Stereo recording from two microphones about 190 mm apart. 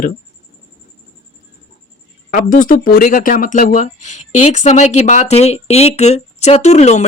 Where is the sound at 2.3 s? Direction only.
45° left (ahead or behind).